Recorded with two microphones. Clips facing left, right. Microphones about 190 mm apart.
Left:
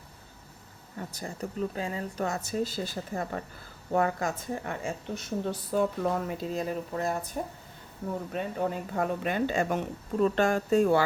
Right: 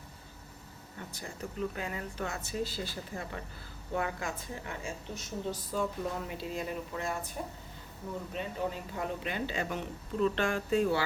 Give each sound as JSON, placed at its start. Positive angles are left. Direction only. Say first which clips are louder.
{"t": 0.9, "sound": "a woman's voice", "louder": "left 6 dB", "side_deg": 40}
{"t": 6.2, "sound": "speech", "louder": "left 5 dB", "side_deg": 40}
{"t": 8.3, "sound": "speech", "louder": "left 4 dB", "side_deg": 50}